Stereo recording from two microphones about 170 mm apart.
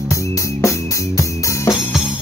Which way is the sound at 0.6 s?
15° left (ahead or behind).